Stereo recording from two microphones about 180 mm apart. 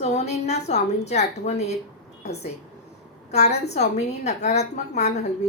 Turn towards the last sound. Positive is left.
turn(degrees=40)  # may be behind; listen again after turning